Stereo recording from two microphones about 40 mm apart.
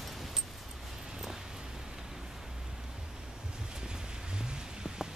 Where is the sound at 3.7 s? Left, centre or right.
Centre.